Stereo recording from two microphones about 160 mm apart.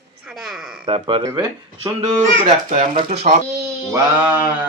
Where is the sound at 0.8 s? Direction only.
30° right (ahead or behind).